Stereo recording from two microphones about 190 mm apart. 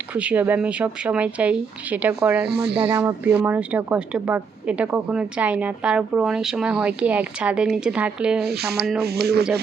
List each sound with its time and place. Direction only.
0.1 s a woman's voice: 5° right (ahead or behind)
2.5 s speech: 60° right (ahead or behind)
2.7 s a woman's voice: 10° right (ahead or behind)
8.4 s speech: 55° right (ahead or behind)